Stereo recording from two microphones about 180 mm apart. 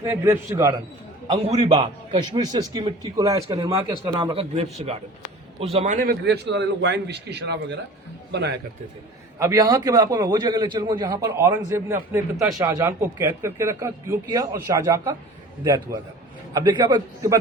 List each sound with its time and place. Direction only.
0.0 s a man's voice: 15° right (ahead or behind)
1.3 s a man's voice: 35° right (ahead or behind)
6.1 s a man's voice: 65° right (ahead or behind)
9.4 s a man's voice: 20° right (ahead or behind)